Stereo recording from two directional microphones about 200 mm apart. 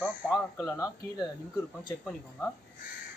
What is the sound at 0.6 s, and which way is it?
Speech, 15° left (ahead or behind).